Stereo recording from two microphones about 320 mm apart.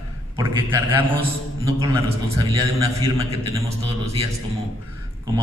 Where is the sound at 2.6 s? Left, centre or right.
Centre.